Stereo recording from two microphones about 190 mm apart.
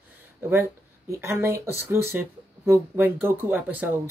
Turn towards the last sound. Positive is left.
turn(degrees=-10)  # may be behind; listen again after turning